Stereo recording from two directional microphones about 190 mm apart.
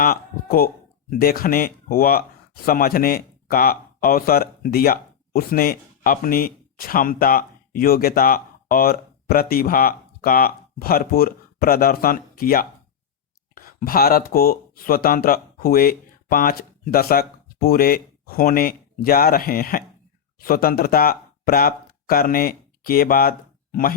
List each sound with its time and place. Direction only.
0.0 s speech: 50° left (ahead or behind)